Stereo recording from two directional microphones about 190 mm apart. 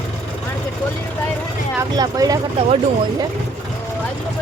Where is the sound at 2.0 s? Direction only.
20° right (ahead or behind).